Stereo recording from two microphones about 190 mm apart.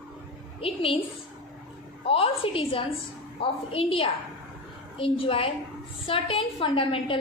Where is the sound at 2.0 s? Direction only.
30° left (ahead or behind).